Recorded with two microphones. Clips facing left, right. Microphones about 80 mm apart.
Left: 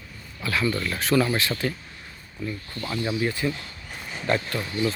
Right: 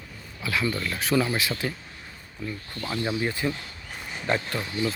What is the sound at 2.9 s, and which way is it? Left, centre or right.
Speech, centre.